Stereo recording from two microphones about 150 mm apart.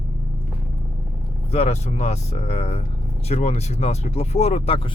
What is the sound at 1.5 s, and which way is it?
Speech, 45° left (ahead or behind).